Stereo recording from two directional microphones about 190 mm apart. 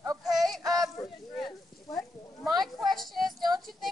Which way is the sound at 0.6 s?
20° right (ahead or behind).